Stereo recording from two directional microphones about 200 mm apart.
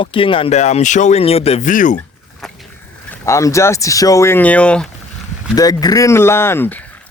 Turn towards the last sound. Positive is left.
turn(degrees=10)  # may be behind; listen again after turning